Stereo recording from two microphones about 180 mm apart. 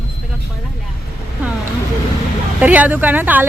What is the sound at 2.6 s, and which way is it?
Speech, 10° right (ahead or behind).